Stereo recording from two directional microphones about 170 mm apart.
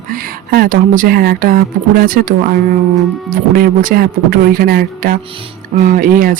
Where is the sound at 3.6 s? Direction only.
60° right (ahead or behind).